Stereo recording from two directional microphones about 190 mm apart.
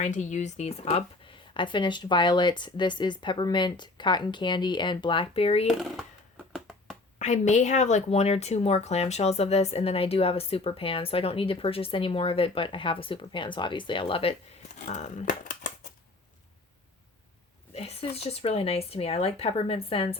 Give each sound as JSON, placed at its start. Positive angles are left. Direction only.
{"t": 0.0, "sound": "speech", "side_deg": 40}
{"t": 6.5, "sound": "finger snapping", "side_deg": 0}
{"t": 7.2, "sound": "speech", "side_deg": 35}
{"t": 17.7, "sound": "speech", "side_deg": 30}